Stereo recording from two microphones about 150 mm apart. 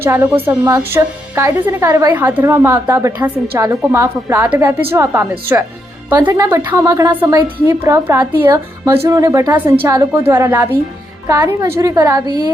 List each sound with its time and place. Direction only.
0.0 s a woman's voice: 15° right (ahead or behind)
6.8 s a woman's voice: 20° right (ahead or behind)